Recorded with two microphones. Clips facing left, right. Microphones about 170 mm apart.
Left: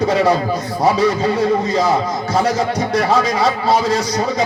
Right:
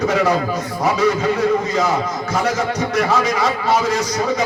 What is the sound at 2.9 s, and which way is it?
Speech, 30° left (ahead or behind).